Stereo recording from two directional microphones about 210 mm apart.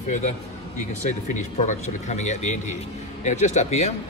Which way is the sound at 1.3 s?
35° left (ahead or behind).